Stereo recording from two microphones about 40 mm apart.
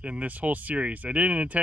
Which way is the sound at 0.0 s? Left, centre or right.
Right.